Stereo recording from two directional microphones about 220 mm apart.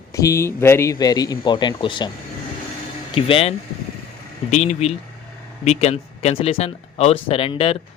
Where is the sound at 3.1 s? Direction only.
25° left (ahead or behind).